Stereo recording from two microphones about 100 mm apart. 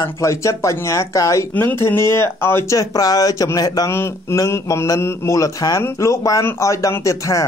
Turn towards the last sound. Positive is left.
turn(degrees=35)  # may be behind; listen again after turning